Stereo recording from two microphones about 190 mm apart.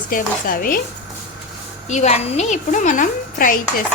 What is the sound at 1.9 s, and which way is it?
A woman's voice, 35° left (ahead or behind).